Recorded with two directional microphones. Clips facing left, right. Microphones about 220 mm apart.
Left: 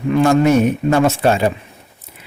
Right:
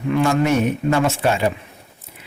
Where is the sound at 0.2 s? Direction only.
40° left (ahead or behind).